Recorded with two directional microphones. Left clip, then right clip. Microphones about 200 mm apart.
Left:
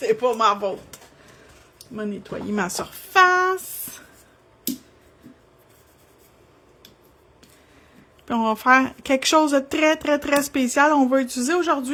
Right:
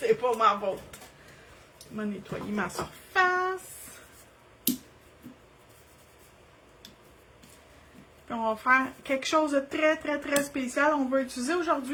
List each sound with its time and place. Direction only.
0.0 s a woman's voice: 55° left (ahead or behind)
2.0 s speech: 45° left (ahead or behind)
3.1 s a sound: 55° left (ahead or behind)
8.3 s a woman's voice: 55° left (ahead or behind)